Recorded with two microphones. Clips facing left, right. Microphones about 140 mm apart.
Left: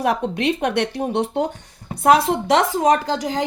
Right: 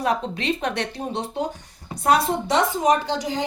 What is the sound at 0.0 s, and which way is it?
Speech, 65° left (ahead or behind).